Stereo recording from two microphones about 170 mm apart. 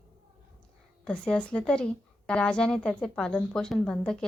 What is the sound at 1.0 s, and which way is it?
A woman's voice, 5° left (ahead or behind).